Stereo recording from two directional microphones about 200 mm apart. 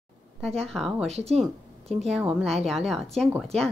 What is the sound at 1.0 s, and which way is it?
Speech, 30° right (ahead or behind).